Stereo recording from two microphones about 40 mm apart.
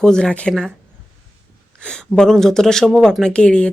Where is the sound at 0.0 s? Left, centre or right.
Centre.